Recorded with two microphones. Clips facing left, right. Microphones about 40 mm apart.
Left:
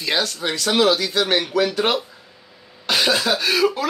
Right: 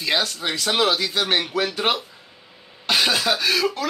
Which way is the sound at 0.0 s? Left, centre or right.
Centre.